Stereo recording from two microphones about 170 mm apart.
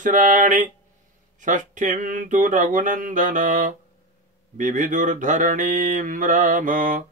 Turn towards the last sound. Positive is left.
turn(degrees=-50)  # may be behind; listen again after turning